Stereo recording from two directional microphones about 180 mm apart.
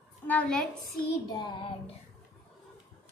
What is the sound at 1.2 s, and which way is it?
Child singing, 25° left (ahead or behind).